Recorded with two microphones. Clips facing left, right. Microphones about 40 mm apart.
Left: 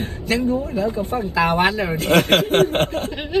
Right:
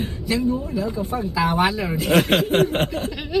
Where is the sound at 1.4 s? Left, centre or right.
Left.